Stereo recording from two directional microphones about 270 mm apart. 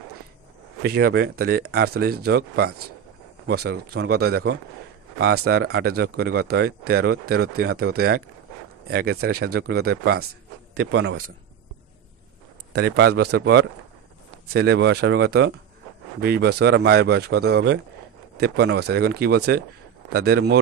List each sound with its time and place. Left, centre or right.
0.8 s a man's voice: right
12.7 s speech: right